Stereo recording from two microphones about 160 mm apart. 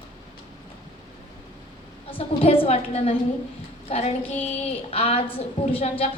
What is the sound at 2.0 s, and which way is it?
A woman's voice, 35° left (ahead or behind).